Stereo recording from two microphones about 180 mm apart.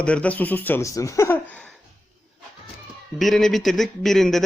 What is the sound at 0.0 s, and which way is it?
Speech, 5° left (ahead or behind).